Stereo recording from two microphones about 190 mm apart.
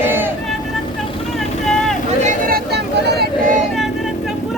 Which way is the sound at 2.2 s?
50° right (ahead or behind).